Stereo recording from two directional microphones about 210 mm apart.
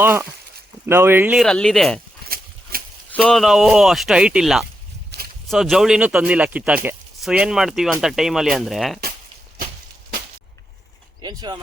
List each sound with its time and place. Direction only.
0.0 s speech: 10° right (ahead or behind)
2.7 s a sound: 45° right (ahead or behind)
3.2 s speech: centre (ahead or behind)
5.1 s a sound: 50° right (ahead or behind)
5.5 s speech: centre (ahead or behind)
11.2 s speech: 20° right (ahead or behind)